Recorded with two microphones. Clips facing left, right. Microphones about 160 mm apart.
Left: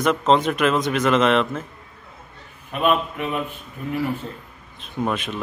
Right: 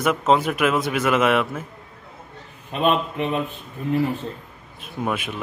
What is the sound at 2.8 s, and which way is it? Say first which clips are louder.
Speech: even; 25° right (ahead or behind).